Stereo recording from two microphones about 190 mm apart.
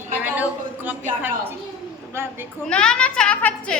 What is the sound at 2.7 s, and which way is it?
A woman's voice, 5° left (ahead or behind).